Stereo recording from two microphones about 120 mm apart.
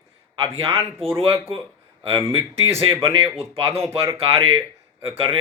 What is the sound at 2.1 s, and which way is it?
Speech, 25° right (ahead or behind).